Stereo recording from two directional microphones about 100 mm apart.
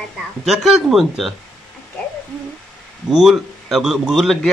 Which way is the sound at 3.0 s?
5° right (ahead or behind).